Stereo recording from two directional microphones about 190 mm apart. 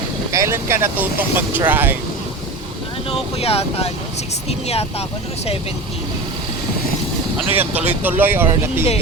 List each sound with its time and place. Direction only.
0.3 s speech: 15° right (ahead or behind)
3.1 s speech: 30° left (ahead or behind)
7.5 s speech: 10° right (ahead or behind)